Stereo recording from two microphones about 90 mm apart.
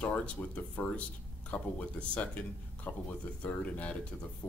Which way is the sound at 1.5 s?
15° left (ahead or behind).